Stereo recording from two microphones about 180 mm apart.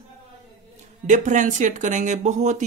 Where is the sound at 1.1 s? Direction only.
45° right (ahead or behind).